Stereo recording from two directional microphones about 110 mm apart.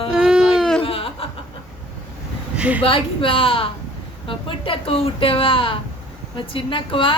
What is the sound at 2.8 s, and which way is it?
A woman's voice, 55° left (ahead or behind).